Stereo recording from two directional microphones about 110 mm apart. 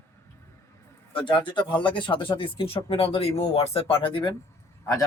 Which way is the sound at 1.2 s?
45° left (ahead or behind).